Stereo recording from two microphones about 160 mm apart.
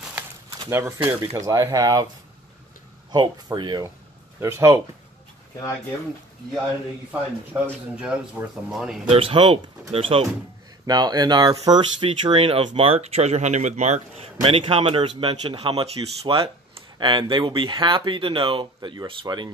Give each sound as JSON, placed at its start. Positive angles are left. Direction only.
{"t": 0.5, "sound": "a sound", "side_deg": -15}
{"t": 1.2, "sound": "speech", "side_deg": -20}
{"t": 3.1, "sound": "speech", "side_deg": -25}
{"t": 7.1, "sound": "speech", "side_deg": -5}
{"t": 9.1, "sound": "speech", "side_deg": -35}
{"t": 10.9, "sound": "speech", "side_deg": -25}